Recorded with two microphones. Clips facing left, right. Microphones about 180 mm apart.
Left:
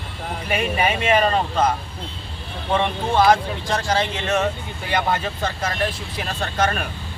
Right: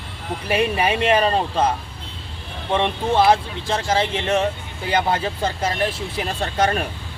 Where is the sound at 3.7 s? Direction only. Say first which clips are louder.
Right 2 dB; 25° right (ahead or behind).